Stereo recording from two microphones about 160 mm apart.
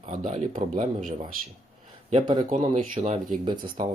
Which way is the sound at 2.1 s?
30° right (ahead or behind).